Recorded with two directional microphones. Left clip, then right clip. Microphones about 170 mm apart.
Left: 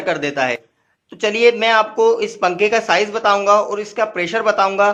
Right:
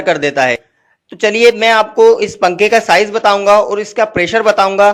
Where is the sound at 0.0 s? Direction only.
35° right (ahead or behind).